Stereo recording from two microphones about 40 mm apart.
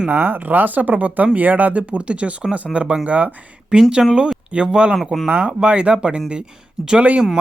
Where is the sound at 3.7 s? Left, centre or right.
Centre.